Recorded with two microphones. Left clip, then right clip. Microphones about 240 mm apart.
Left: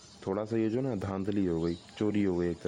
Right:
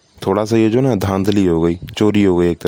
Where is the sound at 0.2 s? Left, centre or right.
Right.